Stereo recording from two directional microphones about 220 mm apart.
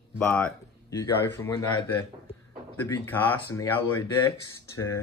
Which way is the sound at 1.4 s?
20° left (ahead or behind).